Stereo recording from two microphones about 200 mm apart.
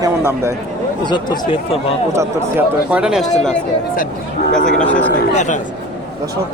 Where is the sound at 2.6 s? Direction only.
5° right (ahead or behind).